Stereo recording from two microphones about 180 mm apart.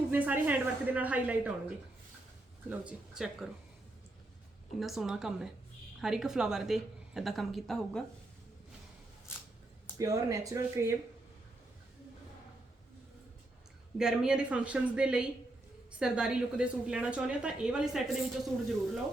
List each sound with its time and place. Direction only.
0.1 s a woman's voice: 10° right (ahead or behind)
2.6 s a woman's voice: 5° right (ahead or behind)
4.8 s a woman's voice: centre (ahead or behind)
10.0 s speech: 20° right (ahead or behind)
14.0 s a woman's voice: 5° right (ahead or behind)